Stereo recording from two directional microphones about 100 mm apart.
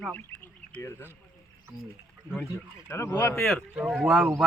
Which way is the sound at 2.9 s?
25° left (ahead or behind).